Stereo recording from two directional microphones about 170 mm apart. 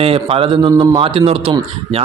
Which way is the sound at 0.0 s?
35° right (ahead or behind).